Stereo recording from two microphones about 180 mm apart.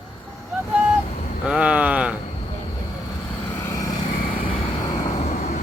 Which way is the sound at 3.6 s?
15° left (ahead or behind).